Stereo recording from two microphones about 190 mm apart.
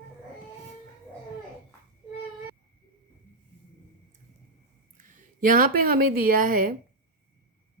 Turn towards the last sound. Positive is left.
turn(degrees=-45)  # may be behind; listen again after turning